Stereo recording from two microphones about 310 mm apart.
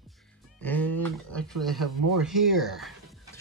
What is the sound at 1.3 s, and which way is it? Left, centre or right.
Speech, centre.